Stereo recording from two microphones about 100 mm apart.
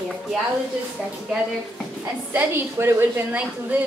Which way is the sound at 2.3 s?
25° right (ahead or behind).